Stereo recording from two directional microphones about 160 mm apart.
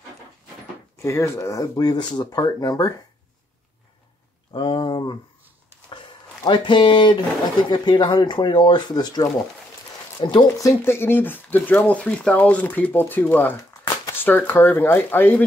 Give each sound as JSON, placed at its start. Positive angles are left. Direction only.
{"t": 1.0, "sound": "speech", "side_deg": 20}
{"t": 4.5, "sound": "a sound", "side_deg": 30}
{"t": 6.0, "sound": "speech", "side_deg": 30}
{"t": 10.9, "sound": "speech", "side_deg": 15}